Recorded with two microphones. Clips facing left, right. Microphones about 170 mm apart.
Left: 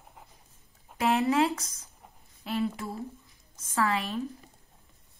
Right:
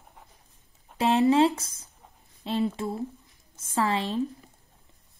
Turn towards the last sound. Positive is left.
turn(degrees=-25)  # may be behind; listen again after turning